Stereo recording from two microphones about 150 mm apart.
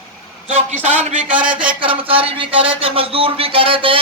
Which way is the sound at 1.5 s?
35° right (ahead or behind).